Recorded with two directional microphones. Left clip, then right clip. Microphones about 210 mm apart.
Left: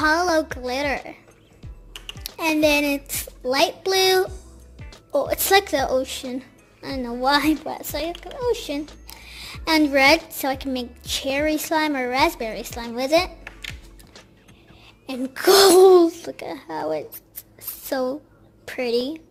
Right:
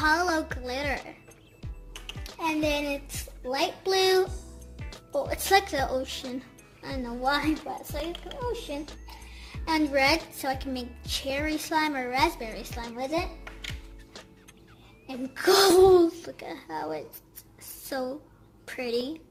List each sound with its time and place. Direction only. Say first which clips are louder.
0.0 s music: left 5 dB; 25° left (ahead or behind)
2.1 s music: left 6 dB; centre (ahead or behind)
2.4 s a woman's voice: left 9 dB; 45° left (ahead or behind)
4.3 s music: left 2 dB; centre (ahead or behind)
5.1 s a child's voice: left 6 dB; 30° left (ahead or behind)
13.7 s music: left 3 dB; centre (ahead or behind)
15.0 s a child's voice: left 6 dB; 35° left (ahead or behind)